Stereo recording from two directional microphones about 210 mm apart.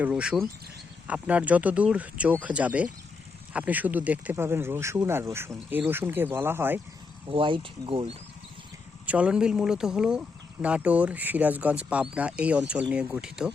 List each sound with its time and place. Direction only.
0.0 s speech: 5° right (ahead or behind)
7.3 s speech: 25° right (ahead or behind)
9.0 s speech: 5° right (ahead or behind)